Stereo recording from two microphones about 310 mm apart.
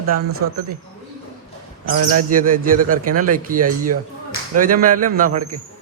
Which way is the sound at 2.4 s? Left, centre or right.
Right.